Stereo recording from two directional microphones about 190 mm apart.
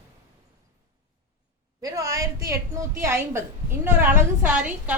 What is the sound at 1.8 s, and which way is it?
A woman's voice, 20° right (ahead or behind).